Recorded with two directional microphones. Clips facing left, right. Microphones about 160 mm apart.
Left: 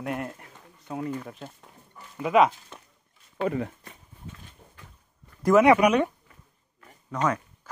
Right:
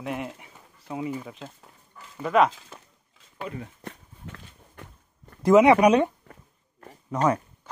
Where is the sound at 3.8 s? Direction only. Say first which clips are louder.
Right 5 dB; 70° right (ahead or behind).